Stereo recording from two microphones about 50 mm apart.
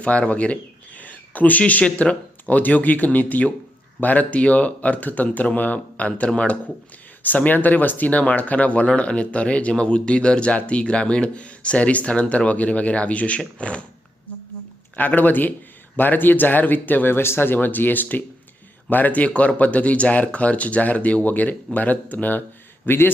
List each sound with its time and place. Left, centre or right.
0.0 s speech: left
7.2 s speech: left
14.9 s speech: left
22.9 s a man's voice: left